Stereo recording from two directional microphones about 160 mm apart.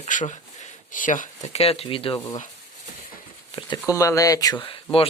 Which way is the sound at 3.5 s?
30° left (ahead or behind).